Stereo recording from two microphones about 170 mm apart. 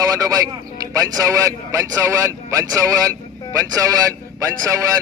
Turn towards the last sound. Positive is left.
turn(degrees=-20)  # may be behind; listen again after turning